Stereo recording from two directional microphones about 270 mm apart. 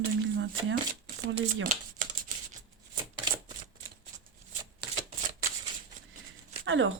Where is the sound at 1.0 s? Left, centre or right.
Right.